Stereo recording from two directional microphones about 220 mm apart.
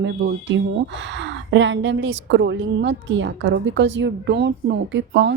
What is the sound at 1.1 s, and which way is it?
A woman's voice, 55° right (ahead or behind).